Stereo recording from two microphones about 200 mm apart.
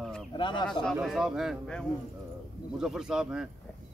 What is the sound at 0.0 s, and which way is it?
Bird, centre (ahead or behind).